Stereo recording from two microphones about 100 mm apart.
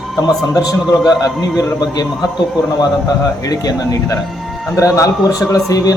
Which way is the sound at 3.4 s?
35° left (ahead or behind).